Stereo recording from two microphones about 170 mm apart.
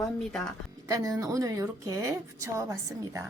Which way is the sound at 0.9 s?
20° right (ahead or behind).